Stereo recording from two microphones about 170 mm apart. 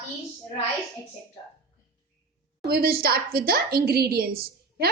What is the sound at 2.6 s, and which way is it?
A woman's voice, 65° right (ahead or behind).